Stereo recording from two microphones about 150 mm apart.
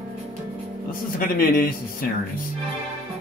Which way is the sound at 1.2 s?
75° left (ahead or behind).